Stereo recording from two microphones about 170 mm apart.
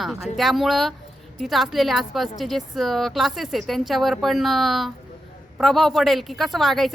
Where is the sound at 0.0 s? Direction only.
Centre (ahead or behind).